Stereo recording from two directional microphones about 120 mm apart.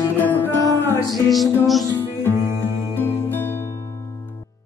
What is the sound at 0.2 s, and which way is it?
Music, 15° left (ahead or behind).